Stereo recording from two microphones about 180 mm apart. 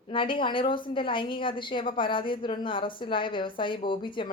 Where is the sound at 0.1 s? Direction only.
30° left (ahead or behind).